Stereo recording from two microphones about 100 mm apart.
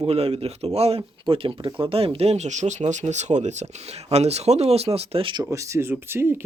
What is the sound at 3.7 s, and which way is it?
Speech, 90° right.